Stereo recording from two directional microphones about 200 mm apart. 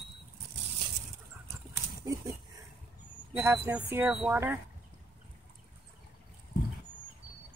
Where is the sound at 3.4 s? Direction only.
10° right (ahead or behind).